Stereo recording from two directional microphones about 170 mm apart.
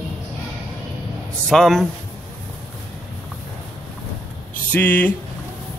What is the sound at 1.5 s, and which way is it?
Speech, centre (ahead or behind).